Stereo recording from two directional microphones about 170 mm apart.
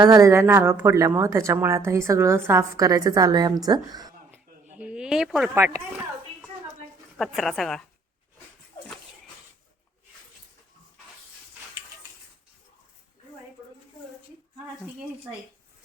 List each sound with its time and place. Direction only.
0.0 s a woman's voice: 20° right (ahead or behind)
4.8 s speech: 5° right (ahead or behind)
7.2 s a woman's voice: centre (ahead or behind)